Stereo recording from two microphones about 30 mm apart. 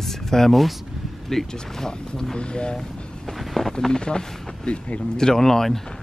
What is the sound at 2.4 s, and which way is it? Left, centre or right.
Speech, left.